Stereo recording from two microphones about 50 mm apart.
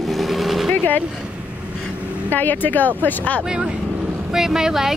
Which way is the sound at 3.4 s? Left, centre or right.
Centre.